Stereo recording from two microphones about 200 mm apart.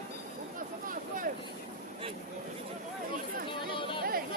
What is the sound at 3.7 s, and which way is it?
Chatter, 25° left (ahead or behind).